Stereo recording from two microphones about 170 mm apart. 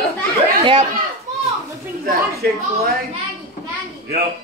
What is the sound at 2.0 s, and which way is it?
Speech, 60° right (ahead or behind).